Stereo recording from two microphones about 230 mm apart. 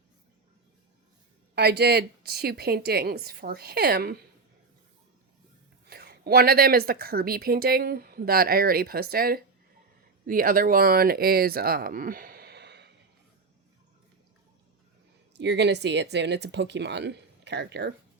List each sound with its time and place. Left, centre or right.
1.5 s a woman's voice: right
5.9 s a woman's voice: right
15.4 s a woman's voice: right